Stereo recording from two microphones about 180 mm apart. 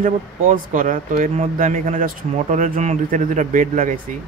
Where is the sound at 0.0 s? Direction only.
45° right (ahead or behind).